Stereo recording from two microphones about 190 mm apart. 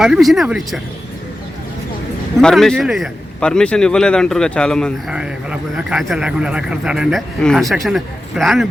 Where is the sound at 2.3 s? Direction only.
Centre (ahead or behind).